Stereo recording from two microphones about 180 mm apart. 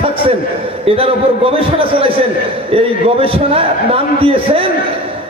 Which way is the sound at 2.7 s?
30° right (ahead or behind).